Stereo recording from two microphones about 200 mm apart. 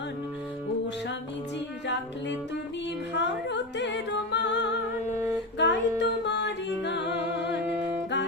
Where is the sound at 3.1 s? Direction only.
60° left (ahead or behind).